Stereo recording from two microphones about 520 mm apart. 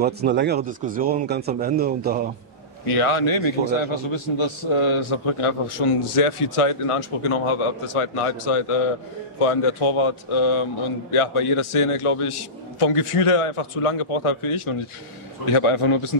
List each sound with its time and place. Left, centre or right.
0.0 s speech: centre
3.0 s a man's voice: left
11.1 s a man's voice: left